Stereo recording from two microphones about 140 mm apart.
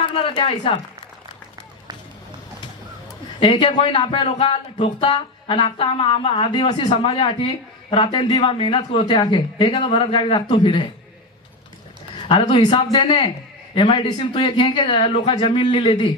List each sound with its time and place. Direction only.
0.2 s speech: 40° left (ahead or behind)
3.3 s speech: 35° left (ahead or behind)
4.3 s speech: 50° left (ahead or behind)
4.8 s speech: 35° left (ahead or behind)
12.3 s speech: 35° left (ahead or behind)